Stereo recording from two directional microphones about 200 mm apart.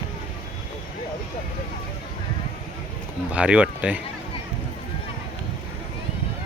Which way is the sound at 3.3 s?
5° right (ahead or behind).